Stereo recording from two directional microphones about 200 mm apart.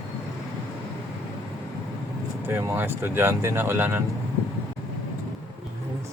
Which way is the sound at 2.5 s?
10° right (ahead or behind).